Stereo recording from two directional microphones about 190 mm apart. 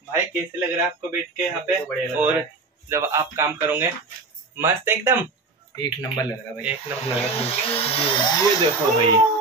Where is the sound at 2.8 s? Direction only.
15° right (ahead or behind).